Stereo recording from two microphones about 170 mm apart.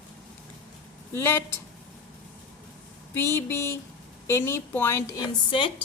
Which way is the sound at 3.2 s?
15° left (ahead or behind).